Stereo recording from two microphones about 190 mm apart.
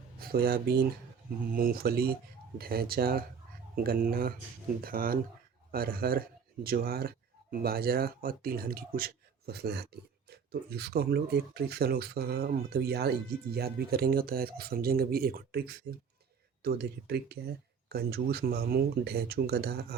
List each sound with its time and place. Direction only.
0.2 s speech: 55° right (ahead or behind)